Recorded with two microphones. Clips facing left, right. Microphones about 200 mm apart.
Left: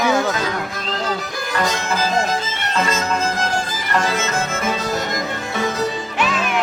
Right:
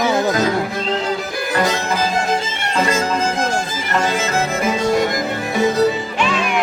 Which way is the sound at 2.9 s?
30° right (ahead or behind).